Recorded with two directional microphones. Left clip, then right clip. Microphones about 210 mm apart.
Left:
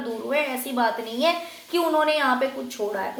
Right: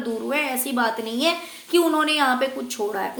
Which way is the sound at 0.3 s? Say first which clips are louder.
Left 1 dB; 50° right (ahead or behind).